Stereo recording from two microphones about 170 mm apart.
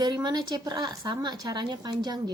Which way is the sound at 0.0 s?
25° right (ahead or behind).